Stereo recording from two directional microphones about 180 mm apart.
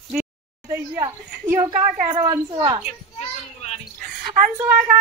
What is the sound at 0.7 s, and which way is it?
A woman's voice, 15° right (ahead or behind).